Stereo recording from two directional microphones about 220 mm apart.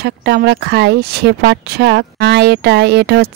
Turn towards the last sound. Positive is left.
turn(degrees=-45)  # may be behind; listen again after turning